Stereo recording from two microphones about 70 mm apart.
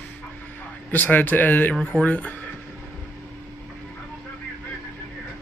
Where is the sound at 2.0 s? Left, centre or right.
Left.